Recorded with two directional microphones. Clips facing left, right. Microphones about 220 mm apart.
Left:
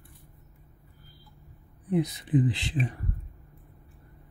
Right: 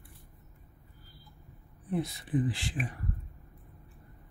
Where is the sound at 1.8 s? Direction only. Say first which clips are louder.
Left 6 dB; 15° left (ahead or behind).